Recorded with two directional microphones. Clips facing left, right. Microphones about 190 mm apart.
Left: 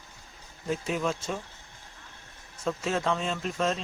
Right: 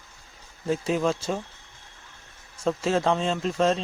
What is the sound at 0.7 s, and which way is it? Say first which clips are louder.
Speech: right 5 dB; 35° right (ahead or behind).